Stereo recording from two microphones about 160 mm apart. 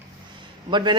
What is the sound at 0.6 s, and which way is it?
Speech, 30° right (ahead or behind).